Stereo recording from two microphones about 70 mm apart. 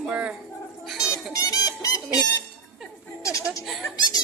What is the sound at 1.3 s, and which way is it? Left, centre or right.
Chicken, left.